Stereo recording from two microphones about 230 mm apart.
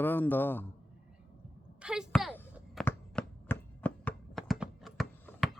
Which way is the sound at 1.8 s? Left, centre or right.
Centre.